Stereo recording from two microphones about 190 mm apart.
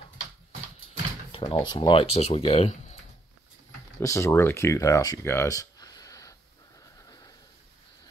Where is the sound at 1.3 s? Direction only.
25° left (ahead or behind).